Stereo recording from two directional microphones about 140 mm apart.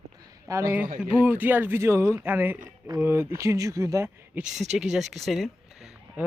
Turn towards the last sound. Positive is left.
turn(degrees=0)  # may be behind; listen again after turning